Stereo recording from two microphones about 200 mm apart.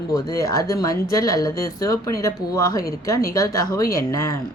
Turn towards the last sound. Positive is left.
turn(degrees=15)  # may be behind; listen again after turning